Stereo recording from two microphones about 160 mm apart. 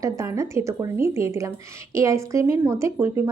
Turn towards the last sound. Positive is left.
turn(degrees=-15)  # may be behind; listen again after turning